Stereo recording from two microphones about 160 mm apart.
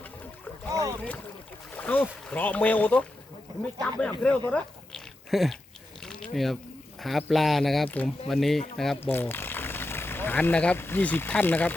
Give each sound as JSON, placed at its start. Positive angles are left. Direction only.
{"t": 0.7, "sound": "boat", "side_deg": -20}
{"t": 1.7, "sound": "speech", "side_deg": 10}
{"t": 6.0, "sound": "mechanisms", "side_deg": 5}
{"t": 7.0, "sound": "speech", "side_deg": 0}
{"t": 9.0, "sound": "speech", "side_deg": 15}